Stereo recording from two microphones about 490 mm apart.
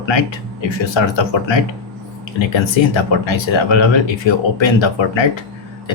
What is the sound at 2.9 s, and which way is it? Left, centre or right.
Speech, left.